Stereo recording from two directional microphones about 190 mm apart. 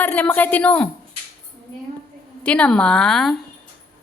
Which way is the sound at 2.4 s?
5° left (ahead or behind).